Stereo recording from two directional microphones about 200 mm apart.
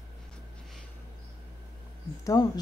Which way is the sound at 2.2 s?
15° left (ahead or behind).